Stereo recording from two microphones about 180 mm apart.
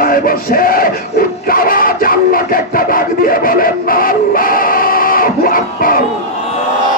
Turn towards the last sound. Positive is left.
turn(degrees=50)  # may be behind; listen again after turning